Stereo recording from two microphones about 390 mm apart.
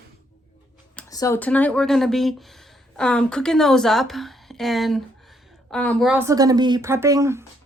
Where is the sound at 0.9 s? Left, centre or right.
Centre.